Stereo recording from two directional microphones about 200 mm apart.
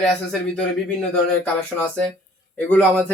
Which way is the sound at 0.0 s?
Centre (ahead or behind).